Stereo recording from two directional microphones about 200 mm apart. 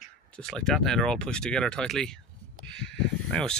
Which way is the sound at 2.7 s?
5° left (ahead or behind).